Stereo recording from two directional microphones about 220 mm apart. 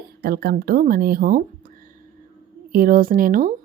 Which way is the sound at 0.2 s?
45° right (ahead or behind).